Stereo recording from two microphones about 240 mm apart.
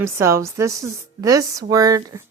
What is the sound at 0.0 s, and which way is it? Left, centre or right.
Speech, centre.